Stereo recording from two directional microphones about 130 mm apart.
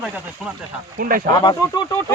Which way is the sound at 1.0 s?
90° right.